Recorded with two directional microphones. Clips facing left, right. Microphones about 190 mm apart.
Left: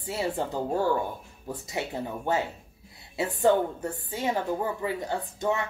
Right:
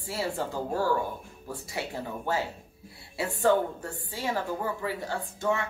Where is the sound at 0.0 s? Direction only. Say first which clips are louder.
Left 2 dB; 20° left (ahead or behind).